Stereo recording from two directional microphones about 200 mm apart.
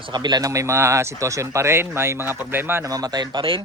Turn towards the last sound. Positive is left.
turn(degrees=-25)  # may be behind; listen again after turning